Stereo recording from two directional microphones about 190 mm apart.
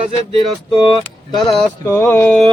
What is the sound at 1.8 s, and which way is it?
Speech, 10° left (ahead or behind).